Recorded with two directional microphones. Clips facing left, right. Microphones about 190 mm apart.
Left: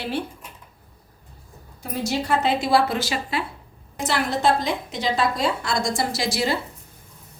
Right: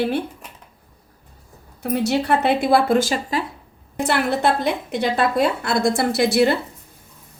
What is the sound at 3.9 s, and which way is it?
A woman's voice, 60° right (ahead or behind).